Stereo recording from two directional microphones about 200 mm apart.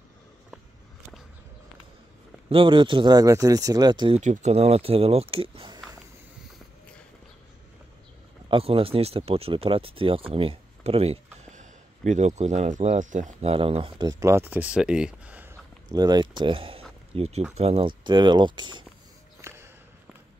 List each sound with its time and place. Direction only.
2.5 s speech: 25° right (ahead or behind)
4.2 s speech: 35° right (ahead or behind)
8.5 s speech: 25° right (ahead or behind); by 15.5 s 5° right (ahead or behind)
15.9 s speech: 20° right (ahead or behind)
19.4 s a sound: 15° right (ahead or behind)